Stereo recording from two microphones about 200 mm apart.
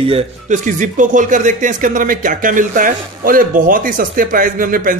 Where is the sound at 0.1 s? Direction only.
40° right (ahead or behind).